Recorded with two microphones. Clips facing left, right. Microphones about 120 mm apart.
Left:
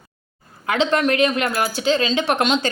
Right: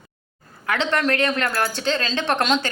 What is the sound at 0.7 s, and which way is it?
A woman's voice, 20° left (ahead or behind).